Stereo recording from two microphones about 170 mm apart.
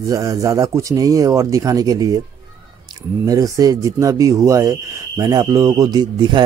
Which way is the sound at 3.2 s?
20° right (ahead or behind).